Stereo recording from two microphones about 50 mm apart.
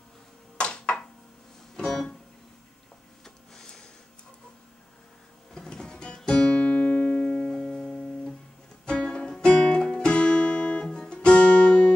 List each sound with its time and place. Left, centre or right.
0.6 s a sound: centre
1.8 s music: centre
3.3 s a sound: centre
5.5 s music: centre
7.4 s music: centre
7.7 s music: centre
10.1 s guitar: left